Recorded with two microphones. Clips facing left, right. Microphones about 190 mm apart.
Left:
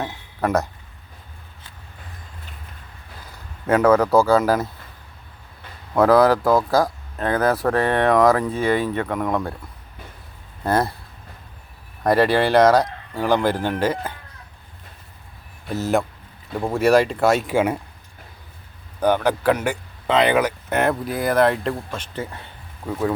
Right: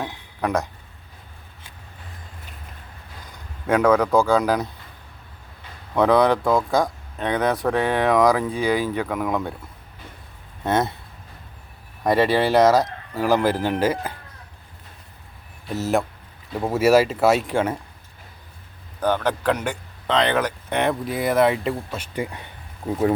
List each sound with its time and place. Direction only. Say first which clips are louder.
0.0 s a sound: left 2 dB; 5° left (ahead or behind)
3.7 s speech: left 2 dB; 5° left (ahead or behind)
5.9 s speech: left 2 dB; 5° left (ahead or behind)
10.6 s speech: left 1 dB; centre (ahead or behind)
12.0 s speech: left 1 dB; centre (ahead or behind)
15.7 s speech: left 1 dB; centre (ahead or behind)
19.0 s speech: left 3 dB; 10° left (ahead or behind); by 23.1 s 20° right (ahead or behind)